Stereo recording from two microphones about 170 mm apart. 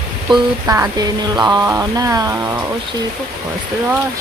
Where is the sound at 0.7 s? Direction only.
20° right (ahead or behind).